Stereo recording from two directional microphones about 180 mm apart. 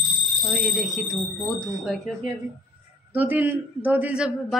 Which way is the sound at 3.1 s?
10° right (ahead or behind).